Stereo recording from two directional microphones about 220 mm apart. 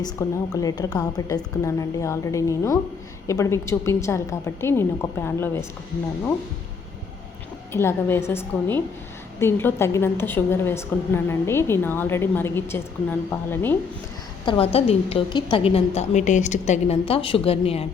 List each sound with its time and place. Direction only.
0.0 s a woman's voice: 15° left (ahead or behind)
7.7 s a woman's voice: 10° left (ahead or behind)
14.4 s a woman's voice: 25° left (ahead or behind)